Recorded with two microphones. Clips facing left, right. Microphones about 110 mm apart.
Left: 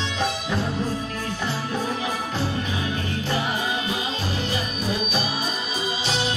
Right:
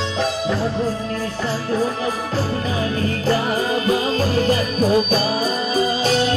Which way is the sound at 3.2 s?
40° right (ahead or behind).